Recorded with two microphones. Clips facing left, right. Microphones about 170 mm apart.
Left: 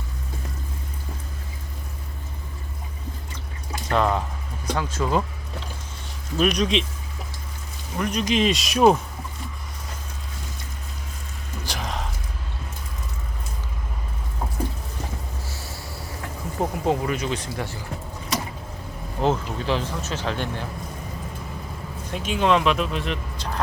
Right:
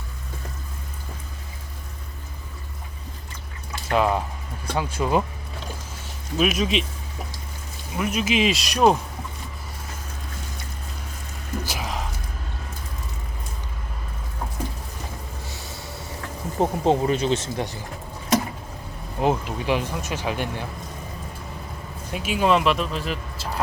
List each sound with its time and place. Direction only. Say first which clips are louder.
3.8 s speech: right 1 dB; 10° right (ahead or behind)
6.3 s speech: left 1 dB; 5° right (ahead or behind)
7.9 s speech: even; 5° right (ahead or behind)
11.6 s music: left 2 dB; 5° right (ahead or behind)
15.4 s a sound: even; 20° right (ahead or behind)
16.6 s speech: right 3 dB; 25° right (ahead or behind)
19.2 s speech: even; 10° right (ahead or behind)
22.1 s speech: even; 5° right (ahead or behind)